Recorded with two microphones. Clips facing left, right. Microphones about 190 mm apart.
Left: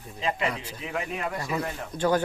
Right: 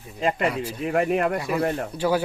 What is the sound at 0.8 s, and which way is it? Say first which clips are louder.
Speech: right 11 dB; 55° right (ahead or behind).